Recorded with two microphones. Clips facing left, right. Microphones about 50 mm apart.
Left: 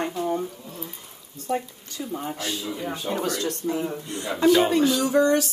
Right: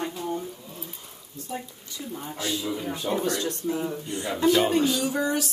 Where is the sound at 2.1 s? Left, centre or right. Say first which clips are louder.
Left 1 dB; left.